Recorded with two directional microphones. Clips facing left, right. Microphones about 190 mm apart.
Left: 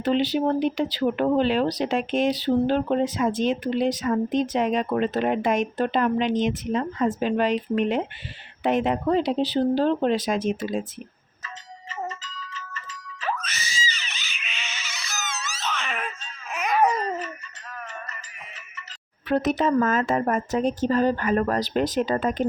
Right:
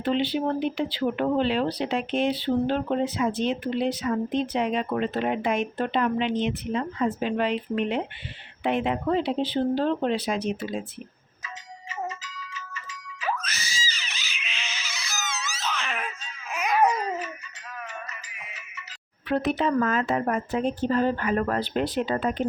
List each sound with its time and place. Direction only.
0.0 s a woman's voice: 40° left (ahead or behind)
11.4 s doorbell: 15° right (ahead or behind)
13.9 s a sound: centre (ahead or behind)
17.7 s music: 10° right (ahead or behind)
19.3 s a woman's voice: 45° left (ahead or behind)